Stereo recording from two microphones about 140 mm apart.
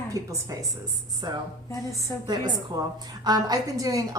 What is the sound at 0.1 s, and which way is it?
A woman's voice, 25° right (ahead or behind).